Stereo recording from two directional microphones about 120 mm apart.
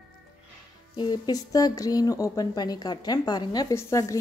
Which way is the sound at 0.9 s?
35° left (ahead or behind).